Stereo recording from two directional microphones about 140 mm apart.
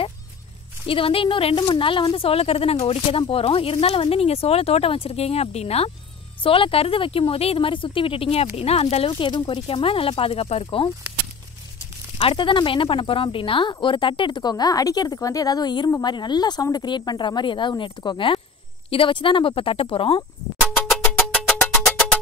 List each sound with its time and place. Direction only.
0.8 s a woman's voice: 40° left (ahead or behind)
9.1 s speech: 35° left (ahead or behind)
12.2 s speech: 40° left (ahead or behind)
21.1 s music: 5° left (ahead or behind)